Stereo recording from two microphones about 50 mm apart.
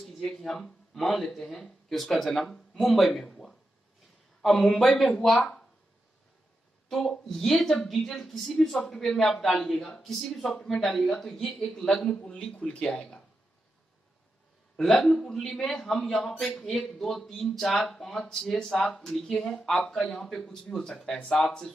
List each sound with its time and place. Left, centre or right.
0.0 s a man's voice: centre
6.9 s a man's voice: centre
14.8 s a man's voice: centre